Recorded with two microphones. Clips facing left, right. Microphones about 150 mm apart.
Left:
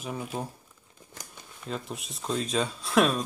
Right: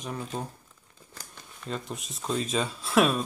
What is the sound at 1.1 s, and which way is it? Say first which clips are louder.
Shuffling cards: left 1 dB; 15° left (ahead or behind).